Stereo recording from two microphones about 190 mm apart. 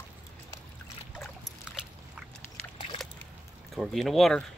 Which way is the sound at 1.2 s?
Centre (ahead or behind).